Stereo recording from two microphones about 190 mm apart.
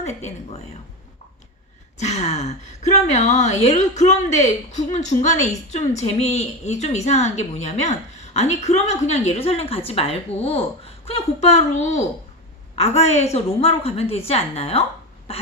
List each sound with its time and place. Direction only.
0.0 s a woman's voice: 35° left (ahead or behind)
2.0 s a woman's voice: 35° left (ahead or behind)